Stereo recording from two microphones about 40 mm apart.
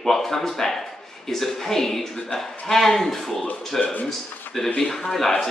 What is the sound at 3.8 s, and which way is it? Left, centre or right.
Speech, left.